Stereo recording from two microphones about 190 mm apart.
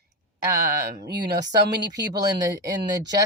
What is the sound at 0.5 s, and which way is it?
Speech, 55° right (ahead or behind).